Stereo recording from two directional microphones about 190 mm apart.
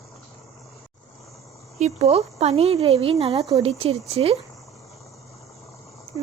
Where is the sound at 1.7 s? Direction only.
35° right (ahead or behind).